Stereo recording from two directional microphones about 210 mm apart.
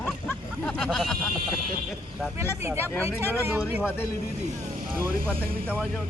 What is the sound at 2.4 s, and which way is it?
Speech, 10° right (ahead or behind).